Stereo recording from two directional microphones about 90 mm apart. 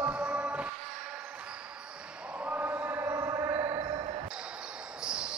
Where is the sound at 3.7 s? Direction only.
55° right (ahead or behind).